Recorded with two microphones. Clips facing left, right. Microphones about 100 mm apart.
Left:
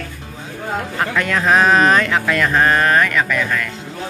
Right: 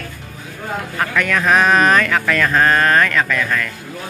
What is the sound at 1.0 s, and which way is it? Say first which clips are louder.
Speech: right 1 dB; 25° left (ahead or behind).